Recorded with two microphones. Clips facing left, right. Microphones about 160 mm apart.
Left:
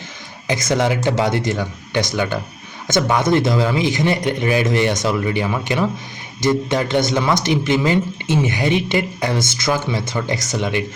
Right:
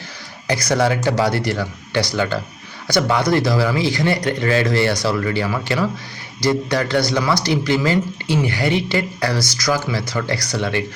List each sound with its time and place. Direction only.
0.4 s speech: 20° left (ahead or behind)